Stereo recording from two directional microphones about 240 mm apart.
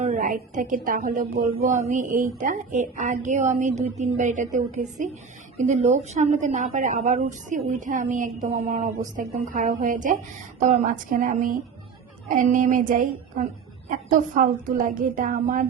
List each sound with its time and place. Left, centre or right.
0.0 s a woman's voice: right
5.6 s a woman's voice: right